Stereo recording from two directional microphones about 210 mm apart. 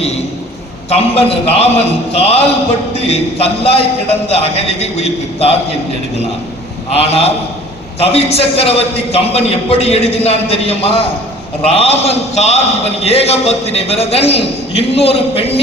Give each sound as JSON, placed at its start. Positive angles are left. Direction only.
{"t": 0.9, "sound": "a man's voice", "side_deg": 30}
{"t": 6.9, "sound": "a man's voice", "side_deg": 30}